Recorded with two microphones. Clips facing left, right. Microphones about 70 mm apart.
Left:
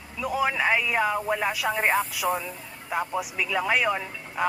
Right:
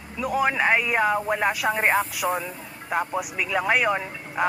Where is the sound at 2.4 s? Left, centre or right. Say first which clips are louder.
Right 2 dB; centre.